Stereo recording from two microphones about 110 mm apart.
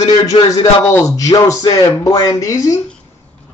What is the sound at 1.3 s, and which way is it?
Music, 45° left (ahead or behind).